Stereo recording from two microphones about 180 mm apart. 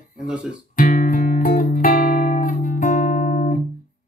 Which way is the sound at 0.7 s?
50° left (ahead or behind).